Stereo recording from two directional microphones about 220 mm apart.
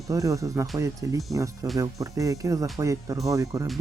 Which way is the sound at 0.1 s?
15° right (ahead or behind).